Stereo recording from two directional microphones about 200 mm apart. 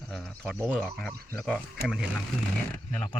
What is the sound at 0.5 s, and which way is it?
Speech, 5° right (ahead or behind).